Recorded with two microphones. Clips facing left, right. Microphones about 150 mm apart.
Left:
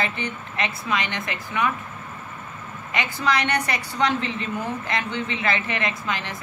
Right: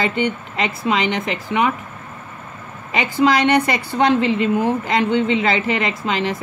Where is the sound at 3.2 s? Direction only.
90° right.